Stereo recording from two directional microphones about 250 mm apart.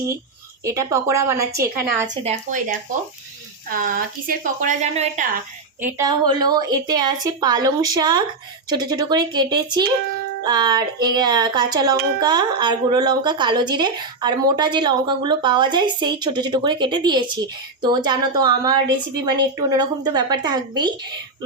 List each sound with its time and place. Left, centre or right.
0.6 s a woman's voice: centre
2.2 s speech: right
5.8 s a woman's voice: centre